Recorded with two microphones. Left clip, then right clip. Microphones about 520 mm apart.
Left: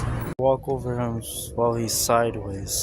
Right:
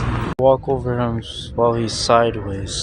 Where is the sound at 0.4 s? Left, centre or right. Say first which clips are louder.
Right 7 dB; left.